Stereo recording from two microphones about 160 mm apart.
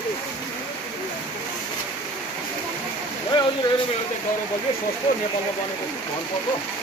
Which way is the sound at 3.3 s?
30° left (ahead or behind).